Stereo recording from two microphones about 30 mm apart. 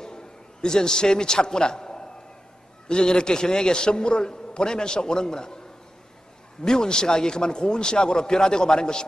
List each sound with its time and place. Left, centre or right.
0.0 s a sound: left
2.9 s a man's voice: left
6.6 s a man's voice: left